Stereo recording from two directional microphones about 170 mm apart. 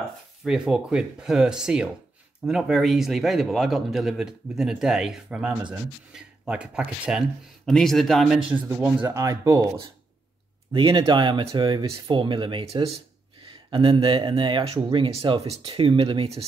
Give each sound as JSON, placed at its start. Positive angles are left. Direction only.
{"t": 0.4, "sound": "a man's voice", "side_deg": -5}
{"t": 9.0, "sound": "speech", "side_deg": -20}
{"t": 10.7, "sound": "speech", "side_deg": -30}